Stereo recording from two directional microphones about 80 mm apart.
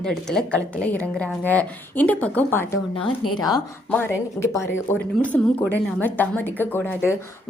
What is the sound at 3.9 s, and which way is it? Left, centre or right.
A woman's voice, left.